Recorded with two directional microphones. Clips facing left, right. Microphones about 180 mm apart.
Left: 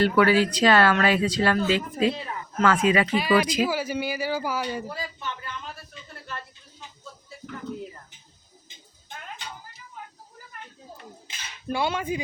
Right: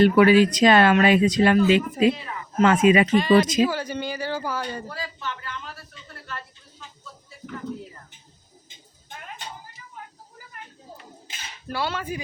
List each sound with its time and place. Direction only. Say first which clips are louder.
0.0 s speech: right 4 dB; 20° right (ahead or behind)
3.2 s speech: right 4 dB; 10° left (ahead or behind)
6.2 s a sound: right 1 dB; 20° left (ahead or behind)
11.7 s speech: left 2 dB; 15° left (ahead or behind)